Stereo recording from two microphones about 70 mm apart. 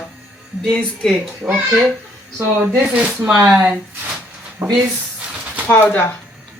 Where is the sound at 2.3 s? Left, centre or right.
Right.